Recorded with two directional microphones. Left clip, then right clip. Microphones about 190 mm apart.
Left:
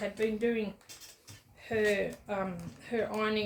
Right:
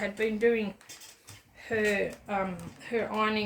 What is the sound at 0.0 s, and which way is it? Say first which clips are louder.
Speech: right 4 dB; 25° right (ahead or behind).